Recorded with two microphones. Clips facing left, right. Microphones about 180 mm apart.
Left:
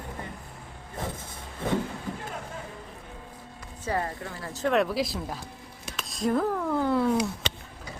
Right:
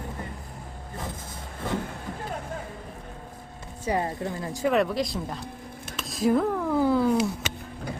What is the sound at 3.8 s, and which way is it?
Speech, 20° right (ahead or behind).